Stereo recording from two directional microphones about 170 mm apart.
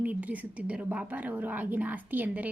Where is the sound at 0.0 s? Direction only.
10° right (ahead or behind).